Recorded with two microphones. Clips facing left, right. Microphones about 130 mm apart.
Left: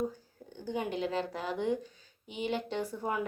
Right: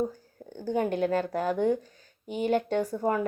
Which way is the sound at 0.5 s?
50° right (ahead or behind).